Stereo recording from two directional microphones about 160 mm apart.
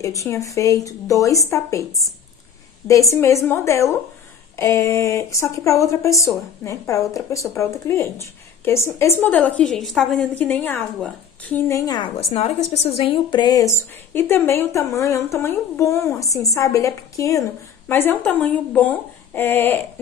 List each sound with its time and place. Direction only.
0.0 s speech: 20° left (ahead or behind)
2.9 s a woman's voice: 20° left (ahead or behind)
12.2 s a woman's voice: 45° left (ahead or behind); by 19.8 s 15° left (ahead or behind)